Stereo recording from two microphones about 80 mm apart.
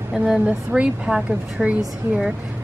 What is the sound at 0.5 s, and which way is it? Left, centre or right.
A woman's voice, centre.